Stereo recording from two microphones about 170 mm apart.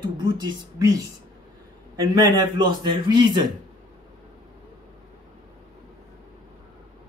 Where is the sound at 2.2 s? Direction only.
25° right (ahead or behind).